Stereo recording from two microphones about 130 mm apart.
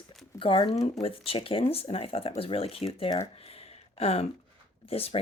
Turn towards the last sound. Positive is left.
turn(degrees=50)  # may be behind; listen again after turning